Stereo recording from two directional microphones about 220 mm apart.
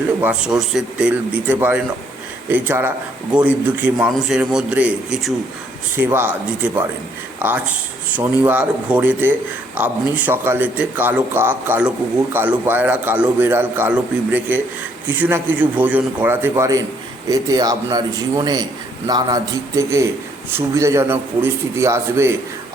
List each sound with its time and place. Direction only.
0.2 s a man's voice: 5° right (ahead or behind)